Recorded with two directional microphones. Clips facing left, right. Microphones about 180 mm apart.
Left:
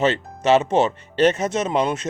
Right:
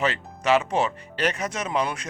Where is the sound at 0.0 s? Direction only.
25° left (ahead or behind).